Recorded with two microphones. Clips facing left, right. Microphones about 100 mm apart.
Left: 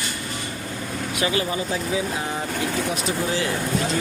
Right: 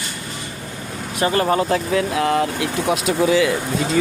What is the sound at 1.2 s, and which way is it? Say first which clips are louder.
Speech: right 7 dB; 50° right (ahead or behind).